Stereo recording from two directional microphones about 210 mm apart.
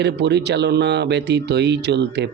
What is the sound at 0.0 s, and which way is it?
Speech, 55° right (ahead or behind).